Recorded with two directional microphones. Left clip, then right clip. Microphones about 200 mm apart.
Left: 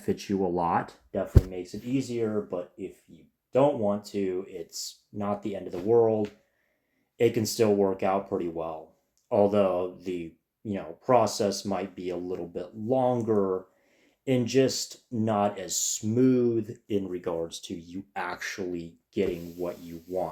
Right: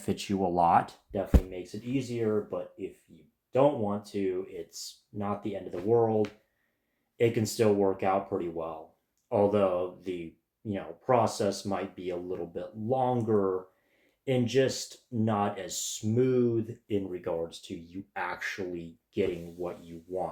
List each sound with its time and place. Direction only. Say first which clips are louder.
0.0 s speech: left 2 dB; 5° right (ahead or behind)
1.1 s speech: left 2 dB; 40° left (ahead or behind)
7.2 s speech: left 2 dB; 45° left (ahead or behind)